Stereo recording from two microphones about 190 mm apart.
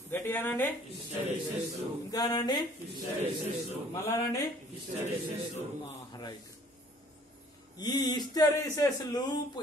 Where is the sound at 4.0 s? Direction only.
15° left (ahead or behind).